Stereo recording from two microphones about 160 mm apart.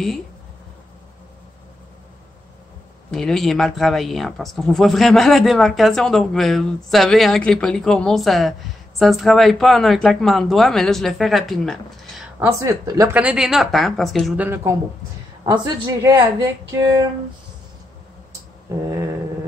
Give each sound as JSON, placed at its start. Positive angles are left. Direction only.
{"t": 3.1, "sound": "speech", "side_deg": 0}
{"t": 12.4, "sound": "a woman's voice", "side_deg": -20}
{"t": 13.1, "sound": "speech", "side_deg": -10}
{"t": 14.4, "sound": "a woman's voice", "side_deg": -15}